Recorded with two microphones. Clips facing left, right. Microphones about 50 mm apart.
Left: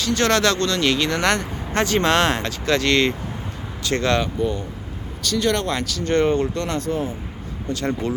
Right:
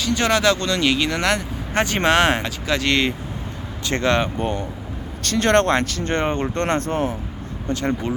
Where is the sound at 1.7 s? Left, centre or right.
Centre.